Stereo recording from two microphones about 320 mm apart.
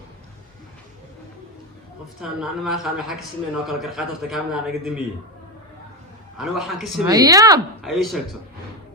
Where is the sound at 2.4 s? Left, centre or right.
Centre.